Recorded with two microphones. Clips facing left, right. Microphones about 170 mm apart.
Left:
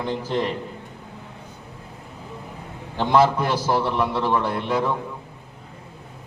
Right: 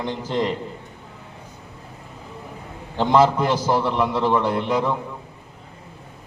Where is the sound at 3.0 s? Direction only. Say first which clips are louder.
Right 1 dB; 20° right (ahead or behind).